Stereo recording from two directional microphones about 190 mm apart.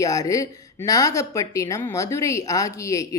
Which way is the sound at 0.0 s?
20° left (ahead or behind).